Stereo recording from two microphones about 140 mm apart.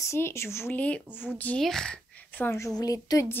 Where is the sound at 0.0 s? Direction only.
20° left (ahead or behind).